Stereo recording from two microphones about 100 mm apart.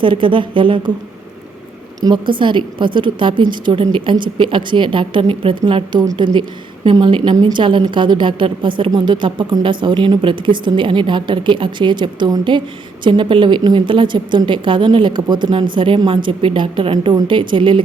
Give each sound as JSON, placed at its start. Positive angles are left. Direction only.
{"t": 0.0, "sound": "a woman's voice", "side_deg": -55}
{"t": 2.0, "sound": "a woman's voice", "side_deg": -50}
{"t": 7.5, "sound": "a woman's voice", "side_deg": -55}